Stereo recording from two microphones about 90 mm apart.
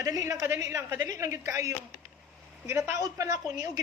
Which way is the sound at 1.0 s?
40° right (ahead or behind).